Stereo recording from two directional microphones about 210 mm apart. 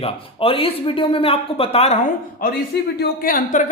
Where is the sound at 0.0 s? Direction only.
25° left (ahead or behind).